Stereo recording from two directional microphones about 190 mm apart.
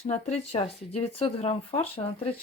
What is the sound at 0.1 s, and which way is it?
Speech, 35° left (ahead or behind).